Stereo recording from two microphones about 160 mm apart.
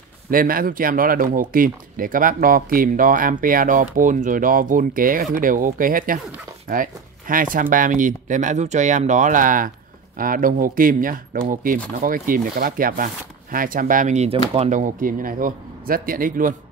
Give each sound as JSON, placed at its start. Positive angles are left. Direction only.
{"t": 0.3, "sound": "speech", "side_deg": -60}